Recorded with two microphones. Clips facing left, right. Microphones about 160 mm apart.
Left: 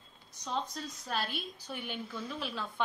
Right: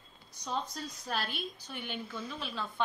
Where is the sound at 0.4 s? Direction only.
Centre (ahead or behind).